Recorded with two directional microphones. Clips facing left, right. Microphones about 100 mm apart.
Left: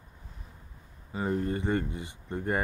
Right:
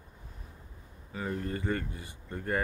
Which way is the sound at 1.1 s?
25° left (ahead or behind).